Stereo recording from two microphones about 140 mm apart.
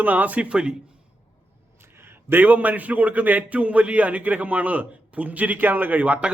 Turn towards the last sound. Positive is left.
turn(degrees=-10)  # may be behind; listen again after turning